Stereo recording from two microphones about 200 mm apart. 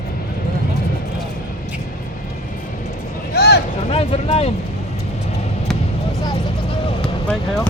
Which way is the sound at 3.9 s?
30° left (ahead or behind).